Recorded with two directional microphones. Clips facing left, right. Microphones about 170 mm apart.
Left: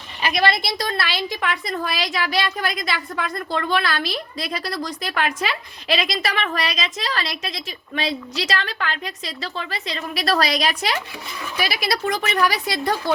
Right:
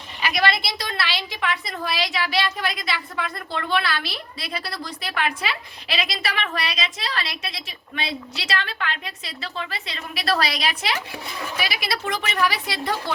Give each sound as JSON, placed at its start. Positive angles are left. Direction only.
{"t": 0.4, "sound": "a woman's voice", "side_deg": 45}